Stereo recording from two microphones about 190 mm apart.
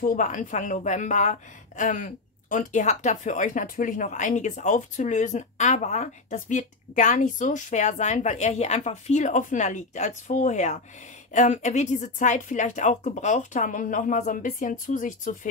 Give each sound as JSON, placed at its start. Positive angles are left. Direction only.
{"t": 0.0, "sound": "a woman's voice", "side_deg": 45}